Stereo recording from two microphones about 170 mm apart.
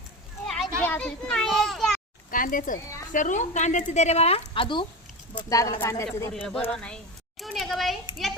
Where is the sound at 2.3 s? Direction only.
55° left (ahead or behind); by 6.3 s 15° left (ahead or behind).